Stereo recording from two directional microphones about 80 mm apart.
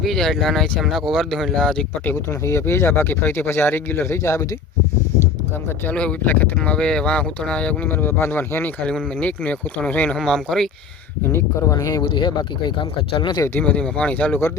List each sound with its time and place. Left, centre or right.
0.0 s speech: centre
2.4 s speech: left
5.9 s speech: centre
8.0 s speech: left
8.8 s speech: centre
10.2 s speech: centre
11.7 s speech: left
12.0 s speech: left
13.6 s speech: centre